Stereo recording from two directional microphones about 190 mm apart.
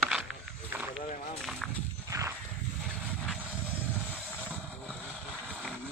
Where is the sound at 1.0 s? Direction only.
40° left (ahead or behind).